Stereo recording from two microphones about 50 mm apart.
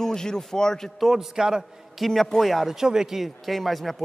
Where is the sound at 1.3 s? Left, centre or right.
Centre.